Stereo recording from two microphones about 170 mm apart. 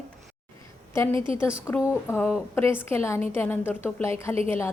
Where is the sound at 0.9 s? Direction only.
15° left (ahead or behind).